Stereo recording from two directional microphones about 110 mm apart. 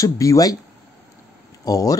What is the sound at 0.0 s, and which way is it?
Speech, 30° left (ahead or behind).